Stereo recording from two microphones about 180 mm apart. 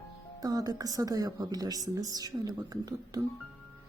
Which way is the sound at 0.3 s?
20° right (ahead or behind).